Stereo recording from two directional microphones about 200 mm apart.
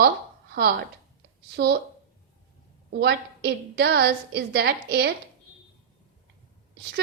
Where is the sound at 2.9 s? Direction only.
55° right (ahead or behind).